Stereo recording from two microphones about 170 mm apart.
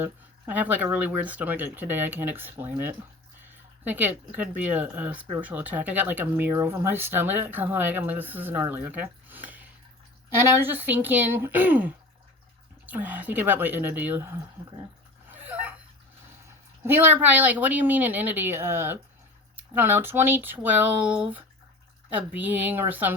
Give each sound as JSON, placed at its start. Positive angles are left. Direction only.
{"t": 0.0, "sound": "speech", "side_deg": -10}
{"t": 15.3, "sound": "a sound", "side_deg": -10}
{"t": 16.8, "sound": "speech", "side_deg": -15}